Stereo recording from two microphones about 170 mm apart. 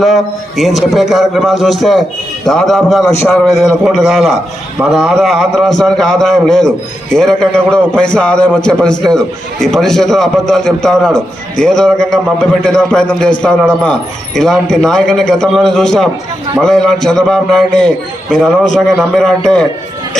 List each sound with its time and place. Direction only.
0.0 s a man's voice: centre (ahead or behind)
3.1 s a man's voice: 15° left (ahead or behind)
3.3 s a man's voice: centre (ahead or behind)